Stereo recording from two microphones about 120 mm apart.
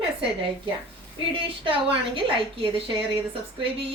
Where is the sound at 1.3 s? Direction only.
50° right (ahead or behind).